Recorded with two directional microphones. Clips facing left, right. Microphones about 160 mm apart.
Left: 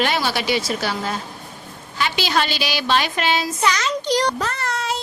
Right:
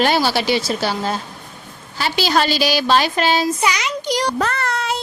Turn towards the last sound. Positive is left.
turn(degrees=-60)  # may be behind; listen again after turning